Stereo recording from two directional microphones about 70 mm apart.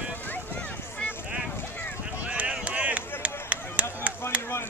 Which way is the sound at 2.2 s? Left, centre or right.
Centre.